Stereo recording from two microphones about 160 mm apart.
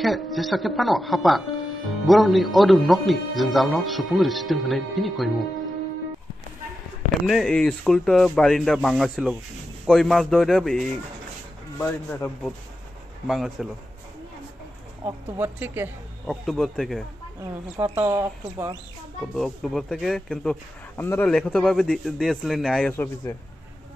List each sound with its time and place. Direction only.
0.0 s speech: centre (ahead or behind)
7.2 s speech: centre (ahead or behind)
13.3 s speech: centre (ahead or behind)
15.0 s speech: 15° right (ahead or behind)
16.3 s speech: centre (ahead or behind)
17.4 s speech: 15° right (ahead or behind)
19.3 s speech: centre (ahead or behind)
21.4 s speech: centre (ahead or behind)